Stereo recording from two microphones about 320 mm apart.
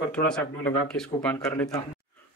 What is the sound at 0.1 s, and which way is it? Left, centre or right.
Speech, centre.